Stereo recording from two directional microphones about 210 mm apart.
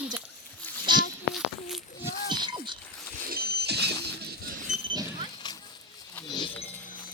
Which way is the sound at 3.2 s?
45° right (ahead or behind).